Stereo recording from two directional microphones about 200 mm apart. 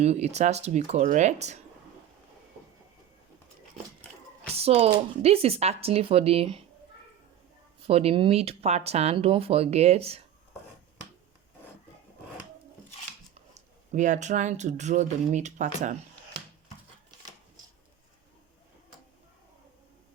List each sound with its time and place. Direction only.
0.0 s speech: 35° right (ahead or behind)
4.5 s speech: 30° right (ahead or behind)
7.9 s speech: 30° right (ahead or behind)
13.5 s speech: 35° right (ahead or behind)